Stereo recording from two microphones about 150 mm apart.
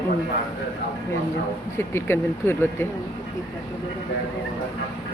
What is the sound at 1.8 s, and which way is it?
Speech, 15° left (ahead or behind).